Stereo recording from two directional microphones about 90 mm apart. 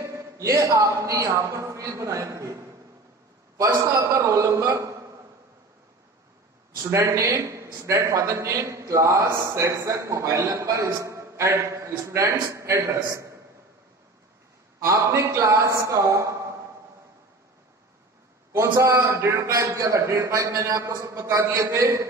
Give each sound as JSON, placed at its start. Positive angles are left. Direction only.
{"t": 0.0, "sound": "a man's voice", "side_deg": -35}
{"t": 4.6, "sound": "a man's voice", "side_deg": -35}
{"t": 6.8, "sound": "a man's voice", "side_deg": -35}
{"t": 7.4, "sound": "a man's voice", "side_deg": -30}
{"t": 14.8, "sound": "a man's voice", "side_deg": -35}
{"t": 18.5, "sound": "a man's voice", "side_deg": -30}